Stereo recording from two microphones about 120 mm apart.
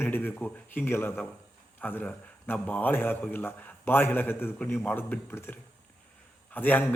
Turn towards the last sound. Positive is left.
turn(degrees=15)  # may be behind; listen again after turning